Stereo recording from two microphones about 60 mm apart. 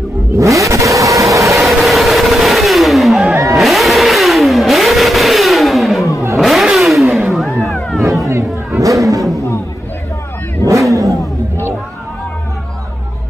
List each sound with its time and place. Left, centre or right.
0.4 s vehicle: right
1.7 s vehicle: centre
8.3 s a sound: right
10.7 s vehicle: right